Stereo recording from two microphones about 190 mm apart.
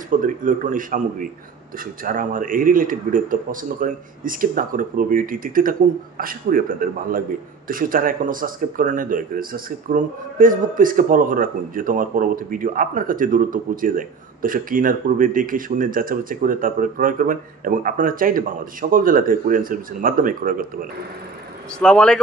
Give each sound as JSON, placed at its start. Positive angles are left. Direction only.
{"t": 0.1, "sound": "speech", "side_deg": -45}
{"t": 21.7, "sound": "speech", "side_deg": 5}